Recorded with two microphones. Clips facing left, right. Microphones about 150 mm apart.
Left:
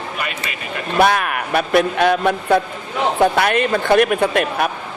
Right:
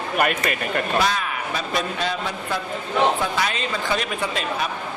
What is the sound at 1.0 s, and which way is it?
Speech, 60° left (ahead or behind).